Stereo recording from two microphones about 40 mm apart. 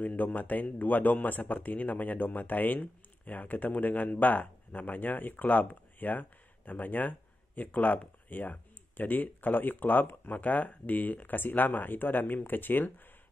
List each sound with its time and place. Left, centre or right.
0.0 s speech: left